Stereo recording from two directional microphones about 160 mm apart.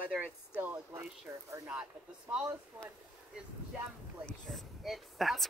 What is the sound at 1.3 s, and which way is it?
Speech, 15° right (ahead or behind).